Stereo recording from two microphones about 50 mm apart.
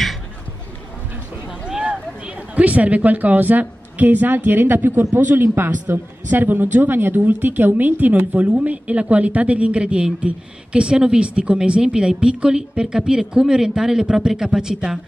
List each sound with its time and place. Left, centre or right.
1.9 s speech: right
8.5 s a woman's voice: right